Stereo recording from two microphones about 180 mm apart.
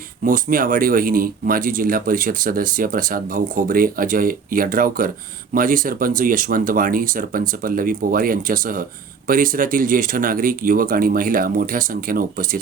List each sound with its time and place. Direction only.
0.3 s speech: 50° right (ahead or behind)